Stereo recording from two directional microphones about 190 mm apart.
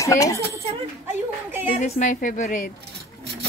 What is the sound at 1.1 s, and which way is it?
Speech, 10° right (ahead or behind).